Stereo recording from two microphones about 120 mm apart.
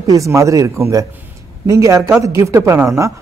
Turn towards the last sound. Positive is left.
turn(degrees=-25)  # may be behind; listen again after turning